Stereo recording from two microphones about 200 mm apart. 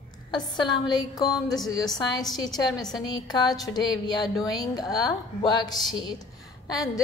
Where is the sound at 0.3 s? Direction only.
20° left (ahead or behind).